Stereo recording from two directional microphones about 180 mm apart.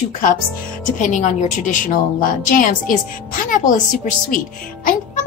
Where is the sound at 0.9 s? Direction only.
45° left (ahead or behind).